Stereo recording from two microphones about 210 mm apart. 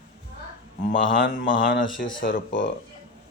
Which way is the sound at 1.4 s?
40° left (ahead or behind).